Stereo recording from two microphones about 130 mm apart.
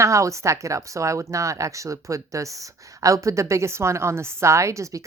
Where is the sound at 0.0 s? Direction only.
25° right (ahead or behind).